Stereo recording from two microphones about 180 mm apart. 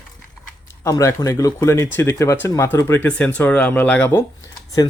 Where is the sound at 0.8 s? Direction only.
15° left (ahead or behind).